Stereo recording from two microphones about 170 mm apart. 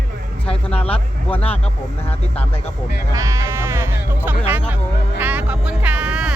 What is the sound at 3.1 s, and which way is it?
Music, 20° right (ahead or behind).